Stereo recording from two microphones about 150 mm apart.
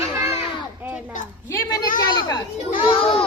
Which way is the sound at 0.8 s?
10° right (ahead or behind).